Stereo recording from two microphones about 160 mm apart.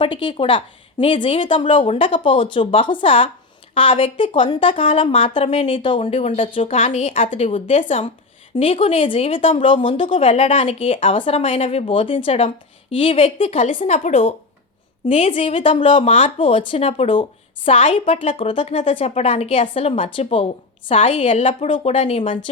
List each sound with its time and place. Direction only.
0.0 s a woman's voice: 30° left (ahead or behind)